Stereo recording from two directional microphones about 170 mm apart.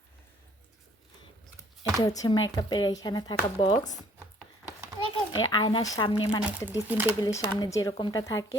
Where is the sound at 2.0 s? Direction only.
20° left (ahead or behind).